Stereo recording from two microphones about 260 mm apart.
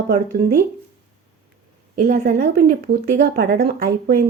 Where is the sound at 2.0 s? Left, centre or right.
Right.